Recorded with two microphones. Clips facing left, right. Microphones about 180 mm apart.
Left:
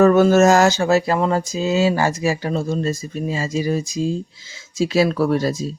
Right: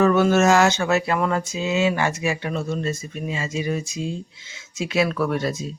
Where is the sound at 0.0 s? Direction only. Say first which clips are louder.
Left 5 dB; 40° left (ahead or behind).